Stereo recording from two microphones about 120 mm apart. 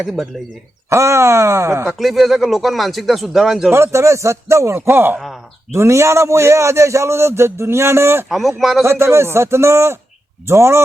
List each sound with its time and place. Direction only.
0.9 s a man's voice: 25° right (ahead or behind)
1.9 s speech: centre (ahead or behind)
3.7 s a man's voice: 20° right (ahead or behind)
8.3 s speech: centre (ahead or behind)
8.8 s a man's voice: 20° right (ahead or behind)